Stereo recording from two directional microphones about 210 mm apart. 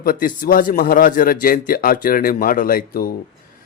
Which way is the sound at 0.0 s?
45° left (ahead or behind).